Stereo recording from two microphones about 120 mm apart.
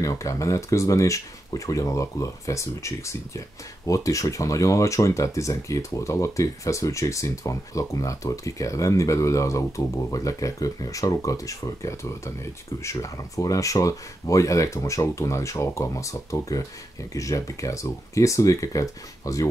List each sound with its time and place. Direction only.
0.0 s speech: 30° left (ahead or behind)